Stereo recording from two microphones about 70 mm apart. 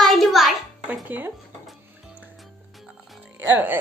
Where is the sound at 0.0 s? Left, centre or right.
Centre.